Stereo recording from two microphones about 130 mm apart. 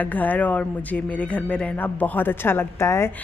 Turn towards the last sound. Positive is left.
turn(degrees=20)  # may be behind; listen again after turning